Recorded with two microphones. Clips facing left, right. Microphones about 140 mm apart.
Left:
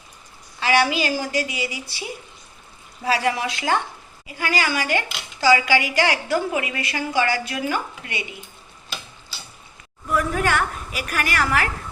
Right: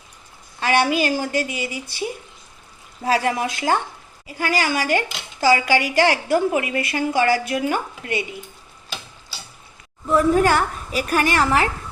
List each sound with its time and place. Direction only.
0.6 s speech: 50° right (ahead or behind)
3.0 s speech: 45° right (ahead or behind)
10.1 s a woman's voice: 30° right (ahead or behind)